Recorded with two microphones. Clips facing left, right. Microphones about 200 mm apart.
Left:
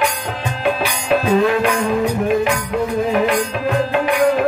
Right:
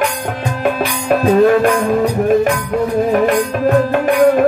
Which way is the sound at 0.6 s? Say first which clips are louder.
Right 2 dB; 50° right (ahead or behind).